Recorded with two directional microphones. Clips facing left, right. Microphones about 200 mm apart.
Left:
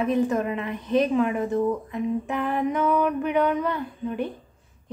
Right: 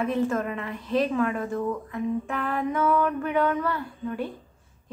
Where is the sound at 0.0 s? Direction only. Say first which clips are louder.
Left 3 dB; 15° left (ahead or behind).